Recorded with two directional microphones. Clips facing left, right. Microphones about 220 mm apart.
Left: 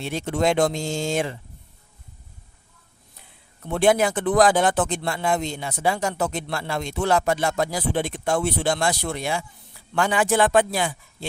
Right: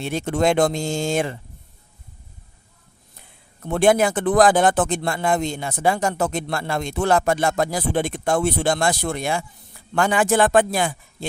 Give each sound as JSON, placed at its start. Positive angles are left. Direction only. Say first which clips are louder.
{"t": 0.0, "sound": "speech", "louder": "right 2 dB", "side_deg": -50}
{"t": 3.7, "sound": "speech", "louder": "right 2 dB", "side_deg": -50}